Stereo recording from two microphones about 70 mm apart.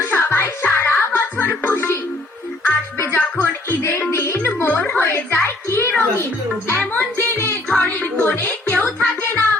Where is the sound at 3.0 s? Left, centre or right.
Left.